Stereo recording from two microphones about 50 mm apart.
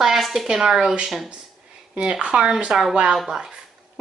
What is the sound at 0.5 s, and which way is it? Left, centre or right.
Speech, centre.